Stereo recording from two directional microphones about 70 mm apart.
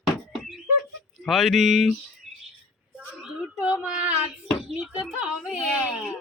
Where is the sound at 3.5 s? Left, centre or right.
Centre.